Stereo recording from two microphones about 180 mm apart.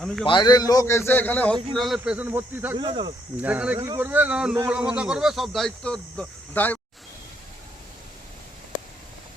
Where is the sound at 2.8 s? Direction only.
25° right (ahead or behind).